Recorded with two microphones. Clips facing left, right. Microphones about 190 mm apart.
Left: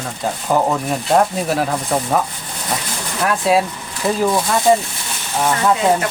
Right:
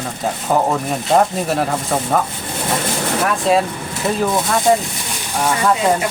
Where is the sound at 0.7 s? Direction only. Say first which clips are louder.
Even; centre (ahead or behind).